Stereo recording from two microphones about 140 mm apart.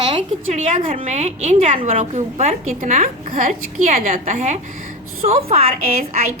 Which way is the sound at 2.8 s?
65° right (ahead or behind).